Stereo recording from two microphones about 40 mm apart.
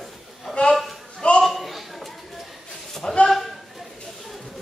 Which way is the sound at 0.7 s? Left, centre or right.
Centre.